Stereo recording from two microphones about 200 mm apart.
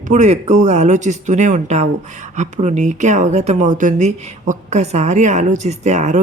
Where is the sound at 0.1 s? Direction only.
35° right (ahead or behind).